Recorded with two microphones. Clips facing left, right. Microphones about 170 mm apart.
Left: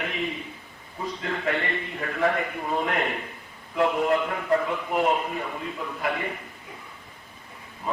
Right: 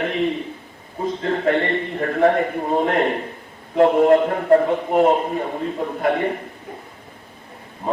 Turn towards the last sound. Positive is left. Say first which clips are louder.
# right 10 dB
turn(degrees=-45)  # may be behind; listen again after turning